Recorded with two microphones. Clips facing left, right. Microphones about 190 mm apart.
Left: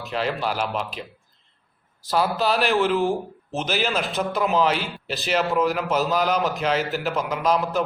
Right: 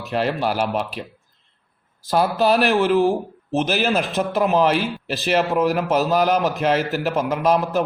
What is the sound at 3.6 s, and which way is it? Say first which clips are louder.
Speech: right 4 dB; 50° right (ahead or behind).